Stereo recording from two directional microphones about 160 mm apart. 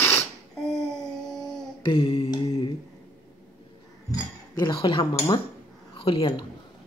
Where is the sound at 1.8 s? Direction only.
30° left (ahead or behind).